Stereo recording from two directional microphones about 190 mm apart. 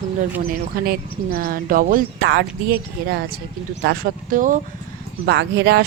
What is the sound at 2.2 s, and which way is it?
Speech, 65° right (ahead or behind).